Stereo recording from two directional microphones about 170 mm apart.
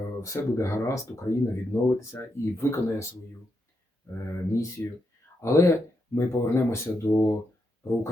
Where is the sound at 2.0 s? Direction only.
15° left (ahead or behind).